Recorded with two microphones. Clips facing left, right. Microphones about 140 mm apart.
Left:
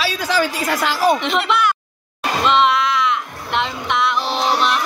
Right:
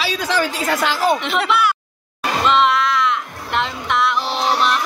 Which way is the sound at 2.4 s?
Centre (ahead or behind).